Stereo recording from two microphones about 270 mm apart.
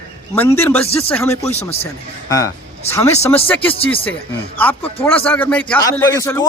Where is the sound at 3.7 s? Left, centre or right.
Left.